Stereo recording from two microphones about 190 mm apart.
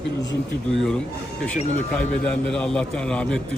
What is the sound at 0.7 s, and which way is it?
Speech, centre (ahead or behind).